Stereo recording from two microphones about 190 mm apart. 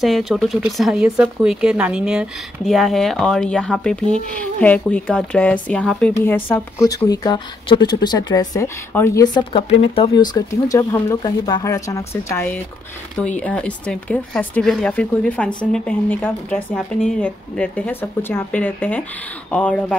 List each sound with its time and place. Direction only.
0.0 s speech: centre (ahead or behind)